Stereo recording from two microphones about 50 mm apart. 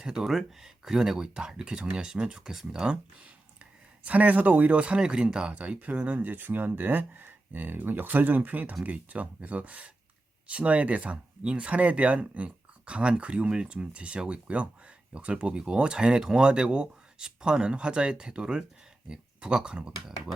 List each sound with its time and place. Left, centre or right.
0.0 s speech: centre
3.6 s speech: right